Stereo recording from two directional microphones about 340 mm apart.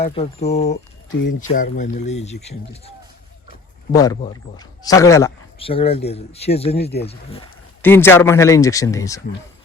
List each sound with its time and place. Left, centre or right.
0.3 s speech: centre
3.9 s speech: centre
6.8 s speech: left
7.1 s speech: centre
7.8 s speech: centre